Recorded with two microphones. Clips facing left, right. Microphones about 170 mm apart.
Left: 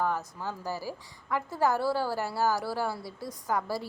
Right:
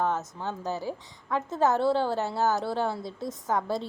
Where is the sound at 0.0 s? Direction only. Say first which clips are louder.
Right 2 dB; 20° right (ahead or behind).